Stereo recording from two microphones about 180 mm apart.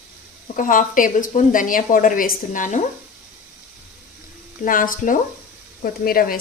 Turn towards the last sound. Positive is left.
turn(degrees=55)  # may be behind; listen again after turning